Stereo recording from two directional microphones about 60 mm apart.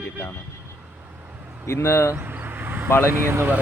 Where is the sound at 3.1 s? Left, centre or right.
Right.